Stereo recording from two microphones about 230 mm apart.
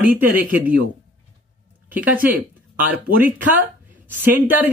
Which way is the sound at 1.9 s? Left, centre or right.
Centre.